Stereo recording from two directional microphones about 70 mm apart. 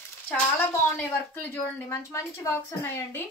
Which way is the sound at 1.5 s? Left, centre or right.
Left.